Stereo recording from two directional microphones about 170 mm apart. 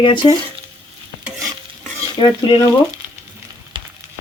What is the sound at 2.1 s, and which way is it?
Speech, 30° left (ahead or behind).